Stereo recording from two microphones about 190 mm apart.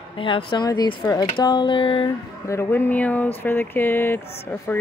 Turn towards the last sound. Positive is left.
turn(degrees=10)  # may be behind; listen again after turning